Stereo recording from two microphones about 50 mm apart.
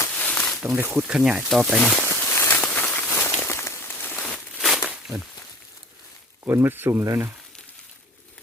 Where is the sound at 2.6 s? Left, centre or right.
Left.